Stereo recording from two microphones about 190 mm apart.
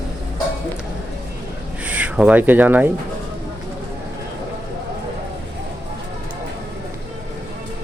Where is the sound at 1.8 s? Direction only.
5° right (ahead or behind).